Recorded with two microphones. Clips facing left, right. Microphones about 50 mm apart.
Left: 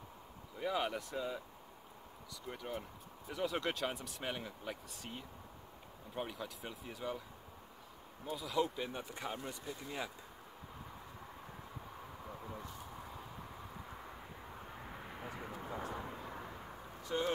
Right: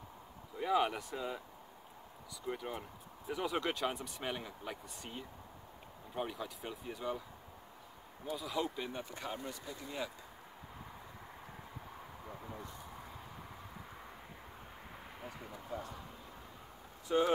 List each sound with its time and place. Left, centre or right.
0.6 s speech: centre
2.4 s speech: centre
8.3 s speech: centre
12.3 s a sound: centre
14.9 s vehicle: centre
15.5 s speech: left
15.9 s a sound: left
17.1 s speech: centre